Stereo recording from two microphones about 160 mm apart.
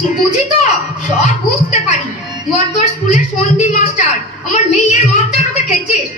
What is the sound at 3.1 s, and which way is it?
A woman's voice, 50° left (ahead or behind).